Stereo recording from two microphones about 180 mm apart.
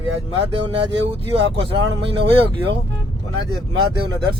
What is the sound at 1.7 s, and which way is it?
Speech, 30° right (ahead or behind).